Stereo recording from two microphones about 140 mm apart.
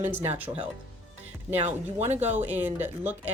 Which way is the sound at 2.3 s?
15° right (ahead or behind).